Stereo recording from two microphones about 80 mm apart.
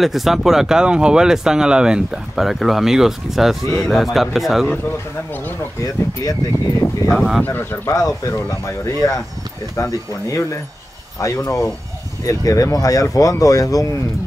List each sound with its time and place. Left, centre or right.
0.0 s speech: centre
6.2 s speech: left
7.1 s speech: centre
7.4 s speech: left
7.9 s speech: left